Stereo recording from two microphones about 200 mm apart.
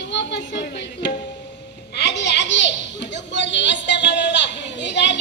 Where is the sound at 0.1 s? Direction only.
60° left (ahead or behind).